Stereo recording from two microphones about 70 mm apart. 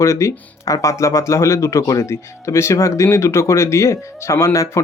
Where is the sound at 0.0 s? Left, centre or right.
Left.